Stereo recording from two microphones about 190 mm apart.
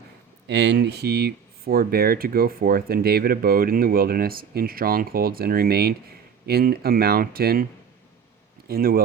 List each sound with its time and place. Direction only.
0.4 s speech: 65° right (ahead or behind)